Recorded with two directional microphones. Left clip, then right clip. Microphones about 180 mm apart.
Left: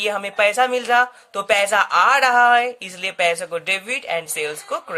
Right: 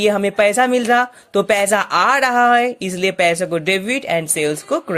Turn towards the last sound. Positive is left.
turn(degrees=-30)  # may be behind; listen again after turning